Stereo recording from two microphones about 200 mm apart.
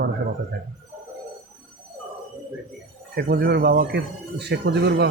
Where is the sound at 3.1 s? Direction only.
55° right (ahead or behind).